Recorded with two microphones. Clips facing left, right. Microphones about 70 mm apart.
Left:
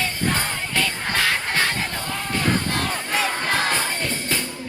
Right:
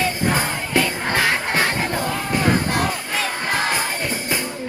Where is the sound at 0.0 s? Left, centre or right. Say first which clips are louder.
Right 4 dB; centre.